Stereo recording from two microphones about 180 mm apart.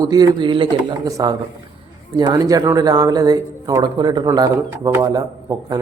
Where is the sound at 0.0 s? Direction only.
20° right (ahead or behind).